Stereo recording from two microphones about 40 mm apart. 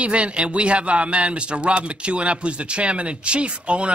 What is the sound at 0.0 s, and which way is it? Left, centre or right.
A man's voice, right.